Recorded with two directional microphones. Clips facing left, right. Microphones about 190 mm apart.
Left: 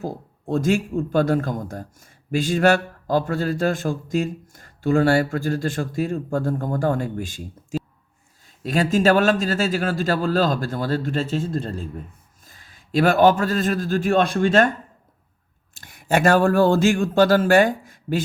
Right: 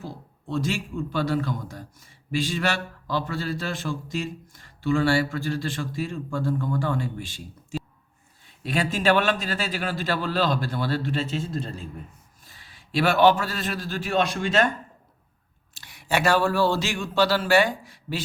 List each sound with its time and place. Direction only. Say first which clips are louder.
0.0 s a man's voice: left 8 dB; 45° left (ahead or behind)
15.8 s speech: left 5 dB; 50° left (ahead or behind)